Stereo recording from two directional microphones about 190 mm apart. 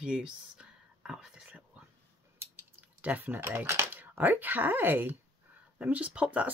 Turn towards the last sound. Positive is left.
turn(degrees=-5)  # may be behind; listen again after turning